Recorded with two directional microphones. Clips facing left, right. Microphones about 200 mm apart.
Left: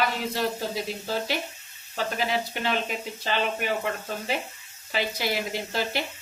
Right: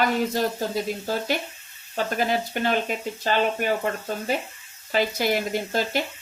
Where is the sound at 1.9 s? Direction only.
50° right (ahead or behind).